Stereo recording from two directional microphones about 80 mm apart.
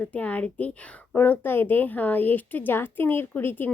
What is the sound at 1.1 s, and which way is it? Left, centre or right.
A woman's voice, left.